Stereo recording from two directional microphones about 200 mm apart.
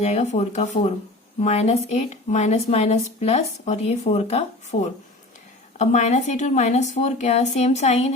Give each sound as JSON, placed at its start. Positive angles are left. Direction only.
{"t": 0.0, "sound": "a woman's voice", "side_deg": 35}